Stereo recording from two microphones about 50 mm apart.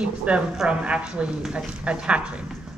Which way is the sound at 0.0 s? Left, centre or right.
Right.